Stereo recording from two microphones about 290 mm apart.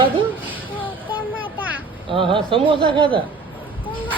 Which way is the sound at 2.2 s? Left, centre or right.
Centre.